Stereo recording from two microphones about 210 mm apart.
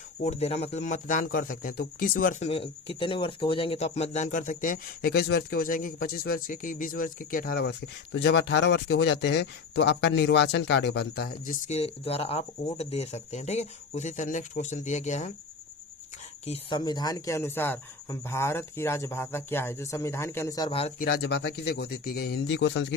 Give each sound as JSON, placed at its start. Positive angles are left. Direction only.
{"t": 0.2, "sound": "speech", "side_deg": 30}
{"t": 11.7, "sound": "speech", "side_deg": 30}
{"t": 16.5, "sound": "speech", "side_deg": 20}
{"t": 21.0, "sound": "speech", "side_deg": 50}